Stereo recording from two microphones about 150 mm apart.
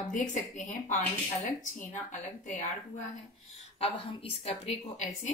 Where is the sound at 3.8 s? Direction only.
40° left (ahead or behind).